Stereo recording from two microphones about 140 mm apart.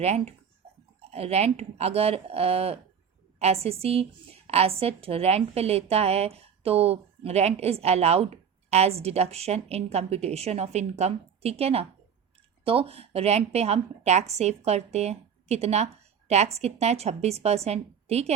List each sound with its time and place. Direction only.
0.0 s a woman's voice: 50° right (ahead or behind)